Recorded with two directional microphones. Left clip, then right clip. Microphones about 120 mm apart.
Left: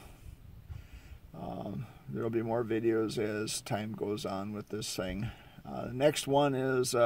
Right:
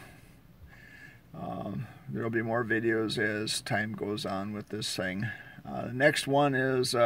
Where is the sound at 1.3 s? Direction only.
15° left (ahead or behind).